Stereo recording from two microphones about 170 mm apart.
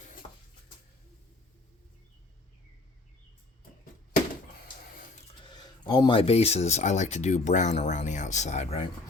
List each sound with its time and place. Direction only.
5.4 s speech: 25° left (ahead or behind)